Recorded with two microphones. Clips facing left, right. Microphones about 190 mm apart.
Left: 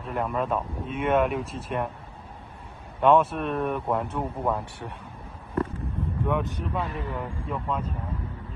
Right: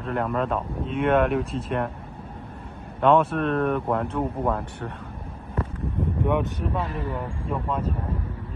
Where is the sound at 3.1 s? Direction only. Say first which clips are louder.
Right 2 dB; 10° left (ahead or behind).